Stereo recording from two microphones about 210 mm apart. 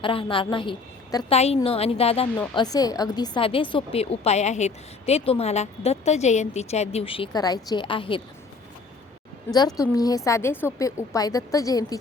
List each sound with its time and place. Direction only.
0.0 s a woman's voice: 25° left (ahead or behind)
9.5 s a woman's voice: 20° left (ahead or behind)